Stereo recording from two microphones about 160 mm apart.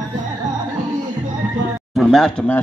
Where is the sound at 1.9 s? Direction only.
Centre (ahead or behind).